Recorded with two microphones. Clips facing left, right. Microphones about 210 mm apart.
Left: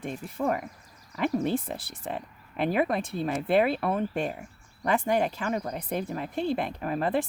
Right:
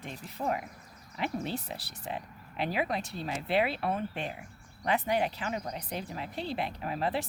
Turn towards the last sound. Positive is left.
turn(degrees=50)  # may be behind; listen again after turning